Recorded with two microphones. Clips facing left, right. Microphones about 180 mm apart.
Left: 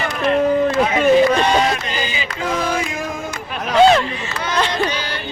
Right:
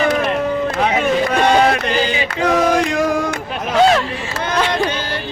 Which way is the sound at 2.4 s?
70° right (ahead or behind).